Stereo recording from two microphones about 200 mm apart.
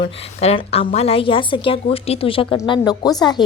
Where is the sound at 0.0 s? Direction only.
30° left (ahead or behind).